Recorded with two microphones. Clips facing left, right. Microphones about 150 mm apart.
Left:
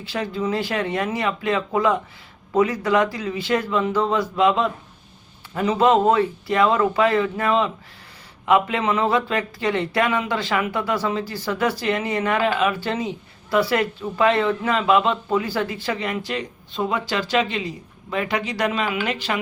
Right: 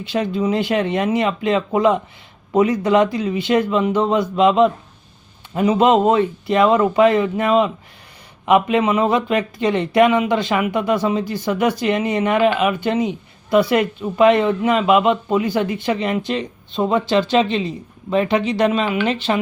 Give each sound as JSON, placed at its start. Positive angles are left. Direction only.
{"t": 0.0, "sound": "speech", "side_deg": -20}